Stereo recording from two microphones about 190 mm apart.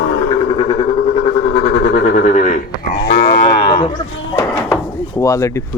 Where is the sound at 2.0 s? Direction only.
45° left (ahead or behind).